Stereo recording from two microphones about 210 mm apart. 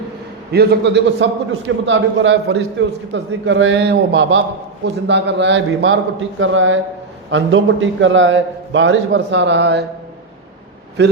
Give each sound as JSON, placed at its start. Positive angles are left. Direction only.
{"t": 0.5, "sound": "a man's voice", "side_deg": -50}
{"t": 1.8, "sound": "a man's voice", "side_deg": -65}
{"t": 11.0, "sound": "a man's voice", "side_deg": -55}